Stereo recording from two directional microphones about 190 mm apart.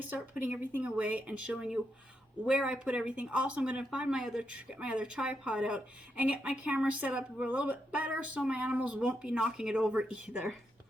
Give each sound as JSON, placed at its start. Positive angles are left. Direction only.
{"t": 0.1, "sound": "speech", "side_deg": -5}